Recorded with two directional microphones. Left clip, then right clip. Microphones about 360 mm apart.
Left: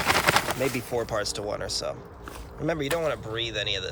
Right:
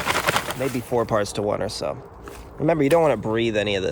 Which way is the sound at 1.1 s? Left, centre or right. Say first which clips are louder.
Right 7 dB; centre.